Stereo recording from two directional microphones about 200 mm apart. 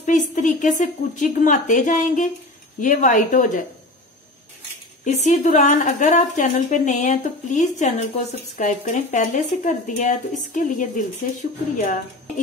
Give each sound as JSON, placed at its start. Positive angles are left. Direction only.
{"t": 0.0, "sound": "a woman's voice", "side_deg": 40}
{"t": 5.0, "sound": "a woman's voice", "side_deg": 35}